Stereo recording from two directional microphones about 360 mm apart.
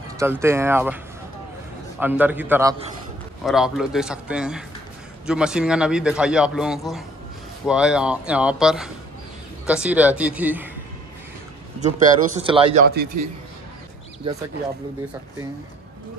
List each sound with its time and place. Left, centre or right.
0.2 s speech: centre
2.0 s a man's voice: centre
11.8 s speech: centre